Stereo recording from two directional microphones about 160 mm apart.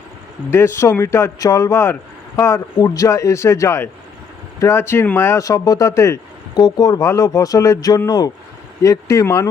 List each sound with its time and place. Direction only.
0.5 s a man's voice: 15° left (ahead or behind)